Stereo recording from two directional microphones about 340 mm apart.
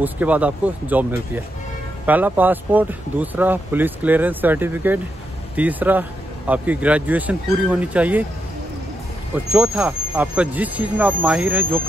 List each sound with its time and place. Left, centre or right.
0.0 s speech: centre
9.5 s speech: centre